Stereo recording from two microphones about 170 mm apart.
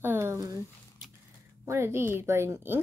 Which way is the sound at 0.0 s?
15° right (ahead or behind).